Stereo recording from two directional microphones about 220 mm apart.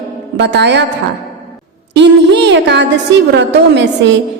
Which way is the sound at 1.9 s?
50° right (ahead or behind).